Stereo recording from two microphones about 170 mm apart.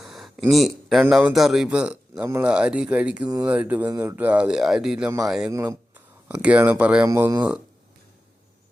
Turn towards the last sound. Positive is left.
turn(degrees=-15)  # may be behind; listen again after turning